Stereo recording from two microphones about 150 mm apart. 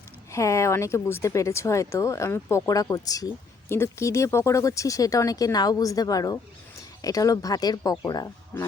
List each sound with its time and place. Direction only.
0.3 s speech: 20° left (ahead or behind)